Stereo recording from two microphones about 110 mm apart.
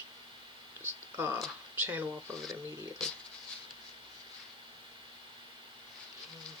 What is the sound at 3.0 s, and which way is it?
Speech, 5° left (ahead or behind).